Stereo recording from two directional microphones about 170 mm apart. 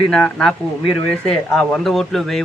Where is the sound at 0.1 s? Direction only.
5° left (ahead or behind).